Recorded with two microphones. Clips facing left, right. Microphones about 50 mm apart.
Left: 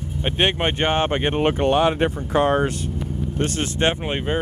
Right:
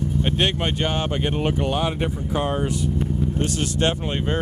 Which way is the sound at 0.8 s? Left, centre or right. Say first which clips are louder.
Left 4 dB; left.